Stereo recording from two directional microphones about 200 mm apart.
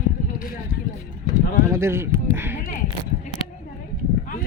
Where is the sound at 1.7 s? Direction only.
15° right (ahead or behind).